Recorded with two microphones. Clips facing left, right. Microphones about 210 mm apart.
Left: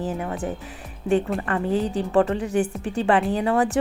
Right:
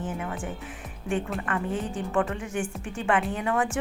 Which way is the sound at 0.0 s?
35° left (ahead or behind).